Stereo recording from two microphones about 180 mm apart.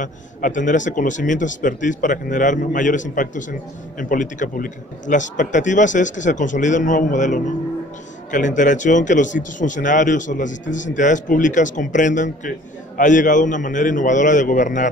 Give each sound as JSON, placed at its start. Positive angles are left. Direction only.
{"t": 0.0, "sound": "speech", "side_deg": 45}